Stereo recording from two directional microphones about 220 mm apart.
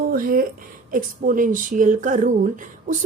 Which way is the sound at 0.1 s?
40° right (ahead or behind).